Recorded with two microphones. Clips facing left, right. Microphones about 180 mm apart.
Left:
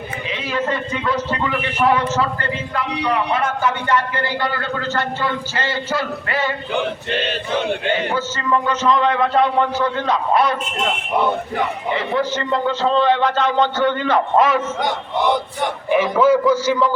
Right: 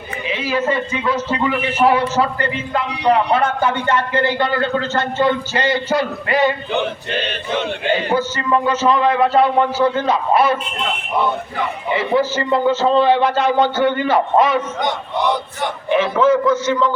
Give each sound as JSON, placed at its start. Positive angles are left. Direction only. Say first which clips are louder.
{"t": 0.3, "sound": "a man's voice", "louder": "right 3 dB", "side_deg": -5}
{"t": 2.7, "sound": "a man's voice", "louder": "right 5 dB", "side_deg": -30}
{"t": 8.6, "sound": "a man's voice", "louder": "right 2 dB", "side_deg": -10}
{"t": 11.9, "sound": "a man's voice", "louder": "right 5 dB", "side_deg": -5}
{"t": 15.9, "sound": "a man's voice", "louder": "even", "side_deg": 10}